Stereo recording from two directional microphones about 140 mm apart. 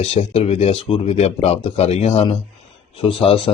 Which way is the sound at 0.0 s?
45° left (ahead or behind).